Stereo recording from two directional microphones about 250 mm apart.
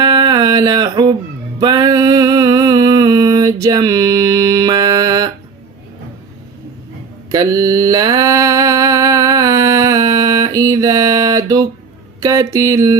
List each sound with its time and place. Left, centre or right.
0.0 s a sound: centre
1.5 s music: centre
7.3 s mantra: centre